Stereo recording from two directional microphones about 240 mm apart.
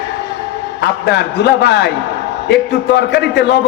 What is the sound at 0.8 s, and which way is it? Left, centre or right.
A man's voice, left.